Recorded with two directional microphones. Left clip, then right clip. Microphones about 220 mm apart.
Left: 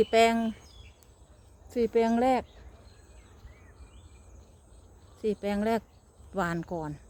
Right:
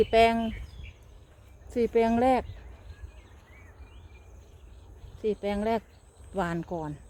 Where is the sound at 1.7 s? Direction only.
10° right (ahead or behind).